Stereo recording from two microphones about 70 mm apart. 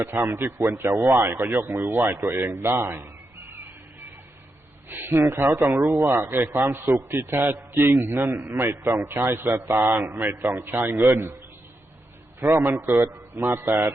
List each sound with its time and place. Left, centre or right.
0.0 s a man's voice: right
4.9 s a man's voice: right
12.4 s a man's voice: right